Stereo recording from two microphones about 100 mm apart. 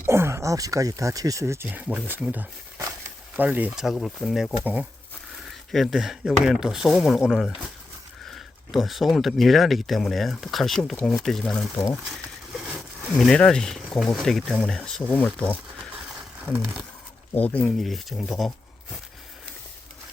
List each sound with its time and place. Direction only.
0.0 s speech: 25° right (ahead or behind)
1.6 s speech: 15° right (ahead or behind)
4.0 s speech: 5° right (ahead or behind)
4.6 s speech: 15° right (ahead or behind)
5.7 s speech: centre (ahead or behind)
12.0 s a sound: centre (ahead or behind)
13.0 s speech: centre (ahead or behind); by 15.5 s 20° left (ahead or behind)
16.5 s speech: 25° right (ahead or behind)
17.3 s speech: 15° left (ahead or behind)
17.7 s speech: centre (ahead or behind)